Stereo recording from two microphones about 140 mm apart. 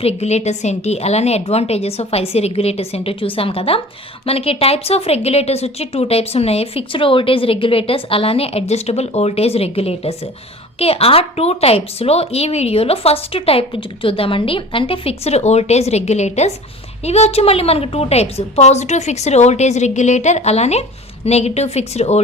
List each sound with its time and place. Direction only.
0.0 s speech: 50° left (ahead or behind)